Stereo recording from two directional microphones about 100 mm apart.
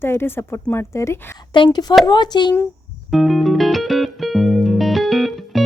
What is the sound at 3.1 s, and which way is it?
Music, centre (ahead or behind).